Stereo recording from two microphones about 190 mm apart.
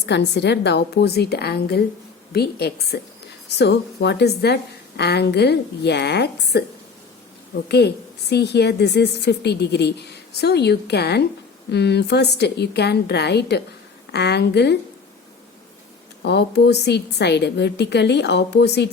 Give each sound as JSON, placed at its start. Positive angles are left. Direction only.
{"t": 0.0, "sound": "a woman's voice", "side_deg": 65}
{"t": 7.7, "sound": "a woman's voice", "side_deg": 60}
{"t": 16.2, "sound": "a woman's voice", "side_deg": 60}